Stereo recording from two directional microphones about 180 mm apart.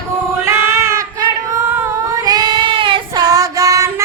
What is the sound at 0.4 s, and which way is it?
Child singing, 15° right (ahead or behind).